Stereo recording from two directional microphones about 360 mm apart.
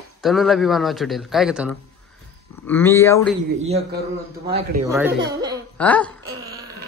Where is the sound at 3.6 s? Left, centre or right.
Centre.